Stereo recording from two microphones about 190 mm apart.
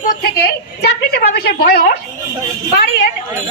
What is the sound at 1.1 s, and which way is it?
Speech, 55° left (ahead or behind).